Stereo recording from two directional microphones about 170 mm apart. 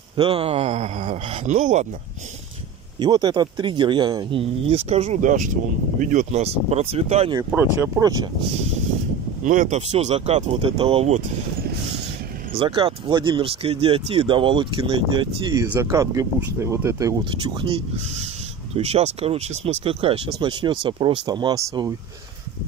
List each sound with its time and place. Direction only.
0.1 s speech: 35° right (ahead or behind)
3.0 s speech: 25° right (ahead or behind)
7.8 s speech: 20° right (ahead or behind)
9.4 s speech: 50° right (ahead or behind)
12.5 s speech: 30° right (ahead or behind)
15.6 s speech: 15° right (ahead or behind)
17.2 s speech: 30° right (ahead or behind)